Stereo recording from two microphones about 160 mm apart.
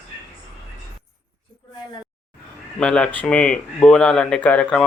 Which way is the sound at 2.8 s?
5° left (ahead or behind).